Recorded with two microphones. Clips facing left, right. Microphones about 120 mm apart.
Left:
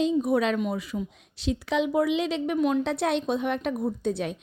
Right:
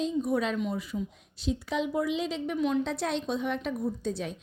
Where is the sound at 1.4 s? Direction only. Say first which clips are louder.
Left 4 dB; 80° left.